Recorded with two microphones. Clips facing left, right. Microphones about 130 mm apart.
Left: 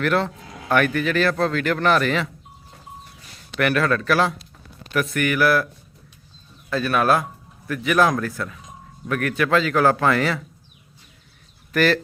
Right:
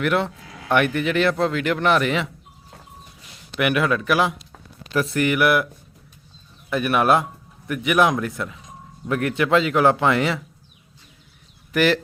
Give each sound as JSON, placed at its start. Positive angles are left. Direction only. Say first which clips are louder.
{"t": 0.0, "sound": "speech", "louder": "even", "side_deg": -15}
{"t": 3.6, "sound": "speech", "louder": "even", "side_deg": -15}
{"t": 4.9, "sound": "speech", "louder": "right 1 dB", "side_deg": -30}
{"t": 6.7, "sound": "speech", "louder": "right 1 dB", "side_deg": -20}
{"t": 11.7, "sound": "speech", "louder": "even", "side_deg": -15}